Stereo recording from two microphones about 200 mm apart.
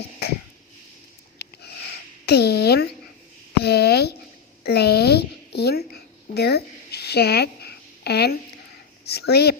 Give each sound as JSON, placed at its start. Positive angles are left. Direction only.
{"t": 1.4, "sound": "sniff", "side_deg": 55}
{"t": 2.2, "sound": "speech", "side_deg": 55}
{"t": 3.6, "sound": "a sound", "side_deg": 55}
{"t": 9.0, "sound": "speech", "side_deg": 55}